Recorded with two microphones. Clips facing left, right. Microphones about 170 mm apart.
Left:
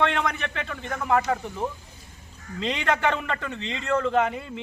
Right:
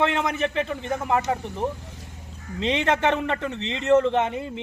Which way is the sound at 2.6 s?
20° right (ahead or behind).